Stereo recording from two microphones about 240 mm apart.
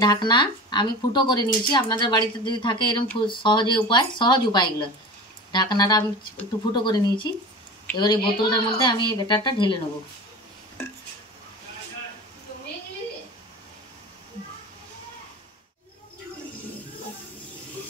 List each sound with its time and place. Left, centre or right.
0.0 s a woman's voice: centre